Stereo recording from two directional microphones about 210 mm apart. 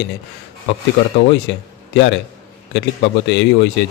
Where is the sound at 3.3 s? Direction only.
55° left (ahead or behind).